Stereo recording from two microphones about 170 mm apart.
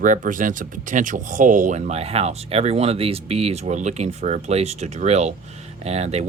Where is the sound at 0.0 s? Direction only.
50° right (ahead or behind).